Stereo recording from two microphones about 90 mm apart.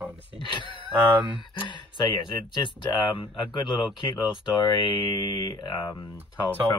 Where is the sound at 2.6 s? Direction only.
55° left (ahead or behind).